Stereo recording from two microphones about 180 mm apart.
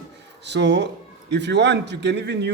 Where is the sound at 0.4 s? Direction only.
75° right (ahead or behind).